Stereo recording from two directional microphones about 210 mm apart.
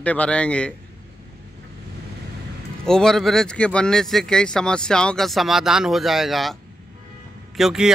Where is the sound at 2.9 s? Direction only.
5° left (ahead or behind).